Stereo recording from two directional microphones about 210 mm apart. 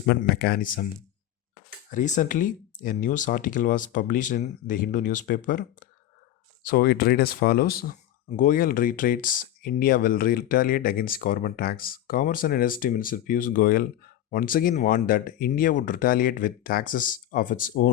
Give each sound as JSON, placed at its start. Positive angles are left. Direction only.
{"t": 0.0, "sound": "speech", "side_deg": 50}
{"t": 1.9, "sound": "speech", "side_deg": 35}